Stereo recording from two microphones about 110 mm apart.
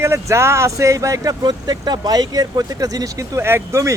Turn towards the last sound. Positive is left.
turn(degrees=-25)  # may be behind; listen again after turning